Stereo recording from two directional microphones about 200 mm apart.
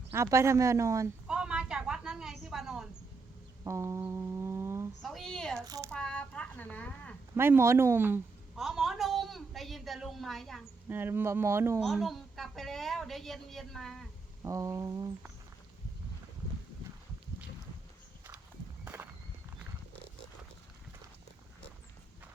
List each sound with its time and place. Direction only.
0.1 s a sound: 15° right (ahead or behind)
3.6 s music: 15° right (ahead or behind)
5.0 s a woman's voice: centre (ahead or behind)
5.5 s speech: 15° right (ahead or behind)
5.9 s a sound: 5° left (ahead or behind)
7.3 s a woman's voice: 10° right (ahead or behind)
10.8 s speech: 10° right (ahead or behind)
11.8 s a woman's voice: centre (ahead or behind)
14.4 s speech: 15° right (ahead or behind)